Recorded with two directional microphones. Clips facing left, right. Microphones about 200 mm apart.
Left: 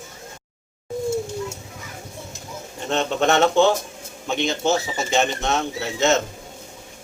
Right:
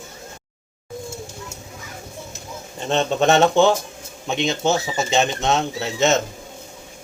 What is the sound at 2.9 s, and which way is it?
Speech, 20° right (ahead or behind).